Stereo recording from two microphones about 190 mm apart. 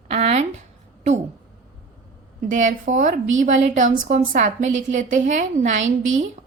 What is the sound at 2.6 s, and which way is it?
A woman's voice, 40° right (ahead or behind).